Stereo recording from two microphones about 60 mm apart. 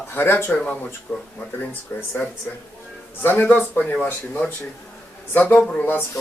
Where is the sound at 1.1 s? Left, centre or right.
Left.